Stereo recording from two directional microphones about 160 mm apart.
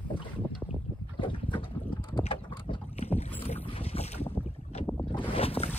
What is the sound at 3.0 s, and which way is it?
Boat, 40° left (ahead or behind).